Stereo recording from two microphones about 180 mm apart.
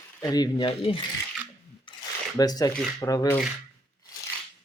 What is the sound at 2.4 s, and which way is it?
Speech, 20° left (ahead or behind).